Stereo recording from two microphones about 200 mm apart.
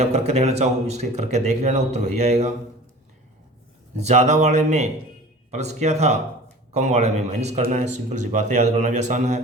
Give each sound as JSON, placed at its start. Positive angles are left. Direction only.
{"t": 0.0, "sound": "speech", "side_deg": -30}
{"t": 3.9, "sound": "speech", "side_deg": -35}